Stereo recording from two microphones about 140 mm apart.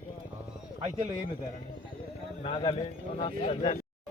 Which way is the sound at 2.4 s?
40° left (ahead or behind).